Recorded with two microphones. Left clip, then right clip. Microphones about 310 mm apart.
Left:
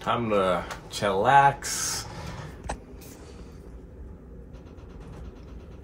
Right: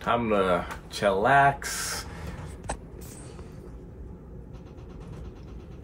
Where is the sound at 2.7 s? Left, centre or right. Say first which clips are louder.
Even; left.